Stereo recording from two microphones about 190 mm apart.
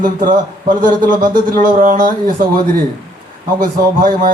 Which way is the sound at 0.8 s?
45° right (ahead or behind).